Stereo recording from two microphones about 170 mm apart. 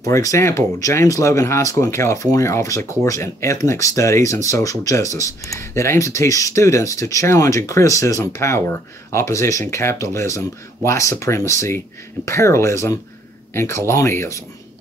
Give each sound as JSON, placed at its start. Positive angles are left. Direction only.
{"t": 0.0, "sound": "speech", "side_deg": 20}